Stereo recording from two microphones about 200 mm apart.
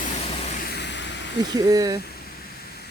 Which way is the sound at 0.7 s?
60° left (ahead or behind).